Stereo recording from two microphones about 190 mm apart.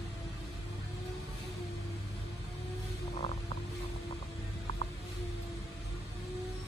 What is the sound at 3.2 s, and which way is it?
Music, 30° left (ahead or behind).